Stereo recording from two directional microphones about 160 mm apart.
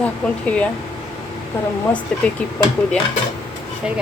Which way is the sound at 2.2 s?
5° left (ahead or behind).